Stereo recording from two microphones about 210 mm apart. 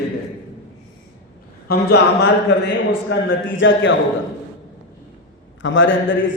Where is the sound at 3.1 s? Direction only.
65° left (ahead or behind).